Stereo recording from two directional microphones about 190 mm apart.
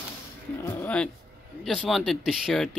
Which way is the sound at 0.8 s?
5° left (ahead or behind).